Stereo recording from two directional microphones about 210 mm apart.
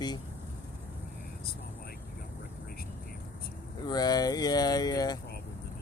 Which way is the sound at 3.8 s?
20° left (ahead or behind).